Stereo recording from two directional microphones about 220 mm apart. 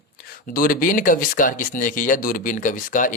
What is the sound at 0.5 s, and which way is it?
Speech, 40° left (ahead or behind).